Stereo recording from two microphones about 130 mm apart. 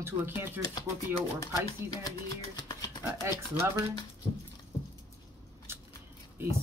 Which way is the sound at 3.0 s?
20° right (ahead or behind).